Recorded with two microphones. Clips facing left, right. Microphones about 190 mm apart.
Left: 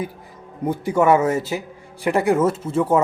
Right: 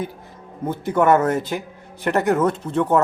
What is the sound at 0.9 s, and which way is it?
Speech, 10° left (ahead or behind).